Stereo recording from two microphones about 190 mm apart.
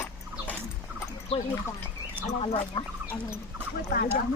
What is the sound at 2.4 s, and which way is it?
Speech, 30° left (ahead or behind).